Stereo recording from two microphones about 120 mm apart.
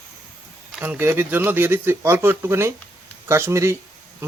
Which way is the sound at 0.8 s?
15° right (ahead or behind).